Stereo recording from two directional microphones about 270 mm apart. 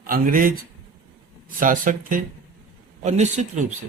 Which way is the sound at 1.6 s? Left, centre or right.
Right.